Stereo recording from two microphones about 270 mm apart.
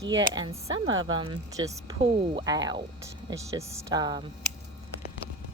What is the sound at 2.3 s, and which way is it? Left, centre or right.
Speech, centre.